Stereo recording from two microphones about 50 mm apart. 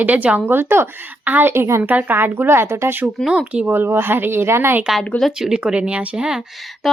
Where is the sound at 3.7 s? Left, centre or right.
Right.